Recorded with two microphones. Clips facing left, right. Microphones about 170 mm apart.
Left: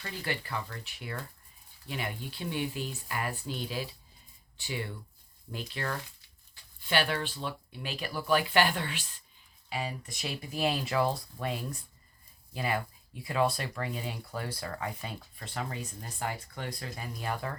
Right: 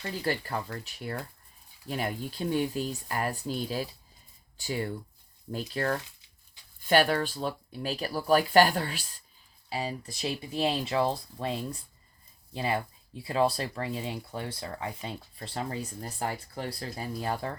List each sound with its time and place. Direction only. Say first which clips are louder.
0.3 s speech: right 4 dB; 40° right (ahead or behind)